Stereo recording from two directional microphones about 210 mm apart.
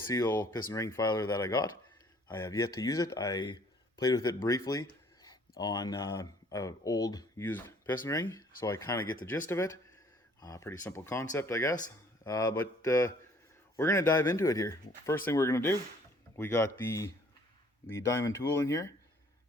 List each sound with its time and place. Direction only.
0.1 s speech: 15° left (ahead or behind)